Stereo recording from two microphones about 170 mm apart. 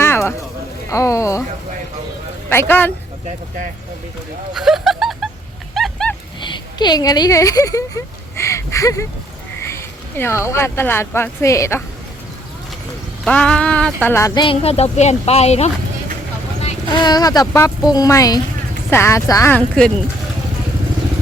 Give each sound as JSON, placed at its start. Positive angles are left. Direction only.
{"t": 0.0, "sound": "a sound", "side_deg": 15}
{"t": 0.9, "sound": "speech", "side_deg": 20}
{"t": 2.5, "sound": "speech", "side_deg": 15}
{"t": 4.5, "sound": "a sound", "side_deg": 0}
{"t": 5.7, "sound": "dog", "side_deg": 5}
{"t": 6.4, "sound": "speech", "side_deg": 25}
{"t": 13.2, "sound": "speech", "side_deg": 5}
{"t": 16.9, "sound": "speech", "side_deg": 25}